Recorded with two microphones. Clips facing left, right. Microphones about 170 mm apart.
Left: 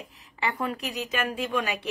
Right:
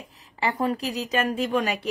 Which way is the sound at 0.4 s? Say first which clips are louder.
Right 5 dB; 40° right (ahead or behind).